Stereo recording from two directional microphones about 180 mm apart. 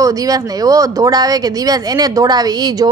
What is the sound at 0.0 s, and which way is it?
A woman's voice, 20° right (ahead or behind).